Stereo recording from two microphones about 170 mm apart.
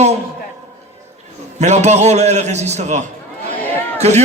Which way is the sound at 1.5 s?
40° right (ahead or behind).